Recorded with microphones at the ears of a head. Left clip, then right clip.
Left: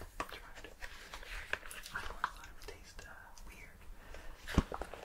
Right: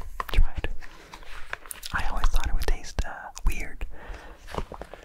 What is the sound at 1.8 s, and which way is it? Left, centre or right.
Whispering, right.